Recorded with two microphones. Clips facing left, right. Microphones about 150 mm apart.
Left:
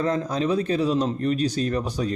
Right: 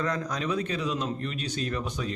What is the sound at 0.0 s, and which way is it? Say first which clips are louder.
A man's voice: left 6 dB; 30° left (ahead or behind).